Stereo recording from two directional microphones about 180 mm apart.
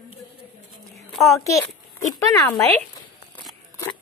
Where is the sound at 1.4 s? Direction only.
15° left (ahead or behind).